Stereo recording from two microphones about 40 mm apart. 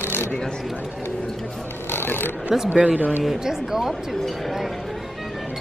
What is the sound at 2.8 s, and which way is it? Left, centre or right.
Speech, right.